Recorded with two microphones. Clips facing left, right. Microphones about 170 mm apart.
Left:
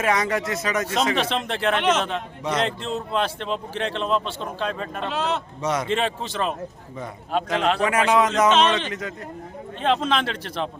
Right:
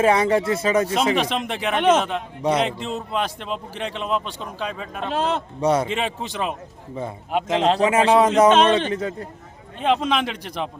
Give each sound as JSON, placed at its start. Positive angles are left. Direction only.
{"t": 0.0, "sound": "speech", "side_deg": -30}
{"t": 1.1, "sound": "speech", "side_deg": -15}
{"t": 5.1, "sound": "a man's voice", "side_deg": -50}
{"t": 5.5, "sound": "speech", "side_deg": -30}
{"t": 5.9, "sound": "speech", "side_deg": -10}
{"t": 7.3, "sound": "speech", "side_deg": -20}
{"t": 8.4, "sound": "a man's voice", "side_deg": -50}
{"t": 8.9, "sound": "speech", "side_deg": -30}
{"t": 9.8, "sound": "speech", "side_deg": -10}